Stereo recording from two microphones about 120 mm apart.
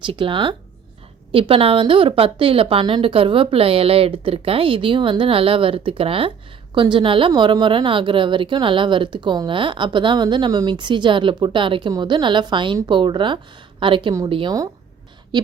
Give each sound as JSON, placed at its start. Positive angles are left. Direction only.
{"t": 0.0, "sound": "a woman's voice", "side_deg": -45}